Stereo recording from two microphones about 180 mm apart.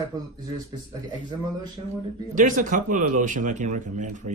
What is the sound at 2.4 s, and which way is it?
Speech, 45° right (ahead or behind).